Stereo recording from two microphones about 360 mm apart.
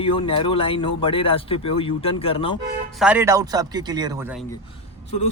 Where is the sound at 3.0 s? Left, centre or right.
Centre.